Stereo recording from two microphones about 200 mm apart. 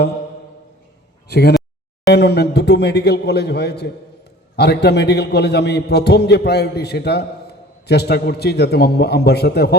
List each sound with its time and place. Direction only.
1.3 s a man's voice: 55° left (ahead or behind)